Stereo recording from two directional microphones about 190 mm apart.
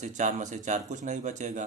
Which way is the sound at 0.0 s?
40° right (ahead or behind).